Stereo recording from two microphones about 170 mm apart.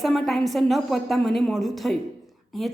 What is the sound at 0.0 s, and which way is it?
A woman's voice, centre (ahead or behind).